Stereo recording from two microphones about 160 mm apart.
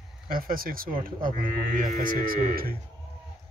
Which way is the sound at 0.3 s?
65° right (ahead or behind).